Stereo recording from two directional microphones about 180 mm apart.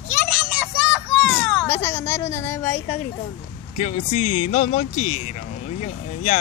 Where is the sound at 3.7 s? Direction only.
40° left (ahead or behind).